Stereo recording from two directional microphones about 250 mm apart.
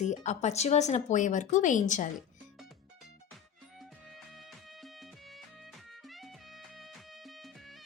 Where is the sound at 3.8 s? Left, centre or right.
Centre.